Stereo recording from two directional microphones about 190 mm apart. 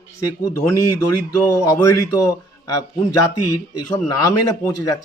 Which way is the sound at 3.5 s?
20° left (ahead or behind).